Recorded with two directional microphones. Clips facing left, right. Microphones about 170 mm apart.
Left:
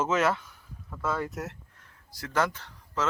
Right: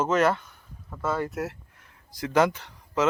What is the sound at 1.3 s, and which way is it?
Speech, centre (ahead or behind).